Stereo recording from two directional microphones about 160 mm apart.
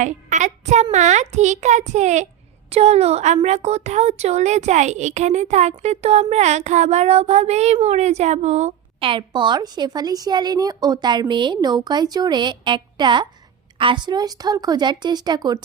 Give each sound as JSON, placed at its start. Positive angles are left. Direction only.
{"t": 0.0, "sound": "a child's voice", "side_deg": -50}